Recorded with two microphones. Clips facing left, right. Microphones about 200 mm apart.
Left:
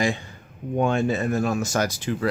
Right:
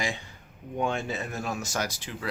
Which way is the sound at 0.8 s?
50° left (ahead or behind).